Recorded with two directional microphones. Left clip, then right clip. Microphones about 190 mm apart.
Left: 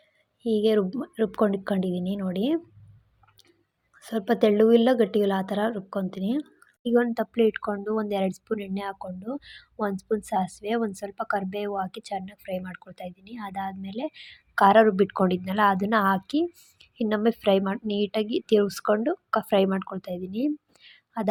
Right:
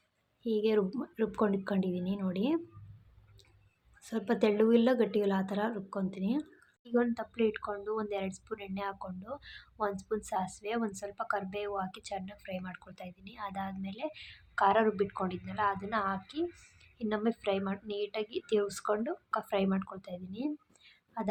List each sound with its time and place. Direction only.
0.4 s a woman's voice: 30° left (ahead or behind)
4.0 s a woman's voice: 30° left (ahead or behind)